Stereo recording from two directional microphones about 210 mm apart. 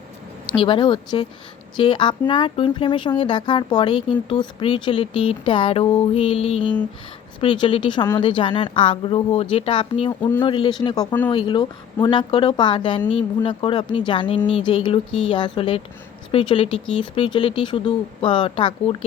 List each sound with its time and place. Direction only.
0.5 s speech: 25° left (ahead or behind)